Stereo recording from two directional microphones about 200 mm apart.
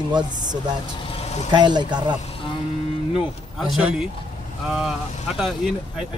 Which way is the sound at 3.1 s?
Centre (ahead or behind).